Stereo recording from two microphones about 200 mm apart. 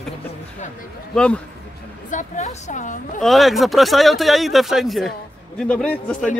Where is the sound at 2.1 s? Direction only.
35° left (ahead or behind).